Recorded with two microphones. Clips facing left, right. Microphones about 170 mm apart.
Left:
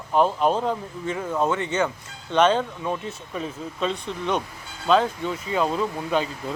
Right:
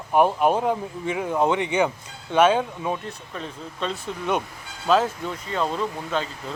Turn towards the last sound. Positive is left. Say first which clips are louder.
# left 2 dB
turn(degrees=10)  # may be behind; listen again after turning